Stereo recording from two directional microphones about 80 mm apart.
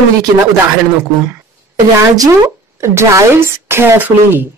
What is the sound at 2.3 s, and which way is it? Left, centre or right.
Speech, right.